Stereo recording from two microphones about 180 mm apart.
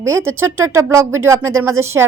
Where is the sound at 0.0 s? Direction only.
15° right (ahead or behind).